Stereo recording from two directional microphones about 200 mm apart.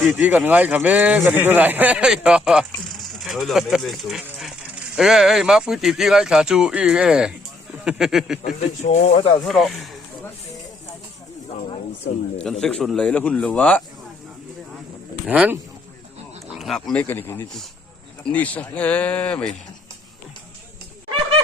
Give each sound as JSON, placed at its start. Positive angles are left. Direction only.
{"t": 0.0, "sound": "speech", "side_deg": -5}
{"t": 8.4, "sound": "speech", "side_deg": 35}
{"t": 9.4, "sound": "speech", "side_deg": 0}
{"t": 12.4, "sound": "speech", "side_deg": 0}
{"t": 15.3, "sound": "speech", "side_deg": -10}
{"t": 16.6, "sound": "speech", "side_deg": 0}